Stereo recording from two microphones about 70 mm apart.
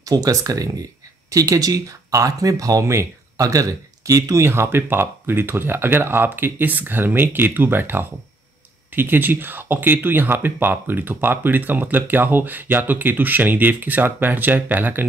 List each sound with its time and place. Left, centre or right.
0.0 s speech: right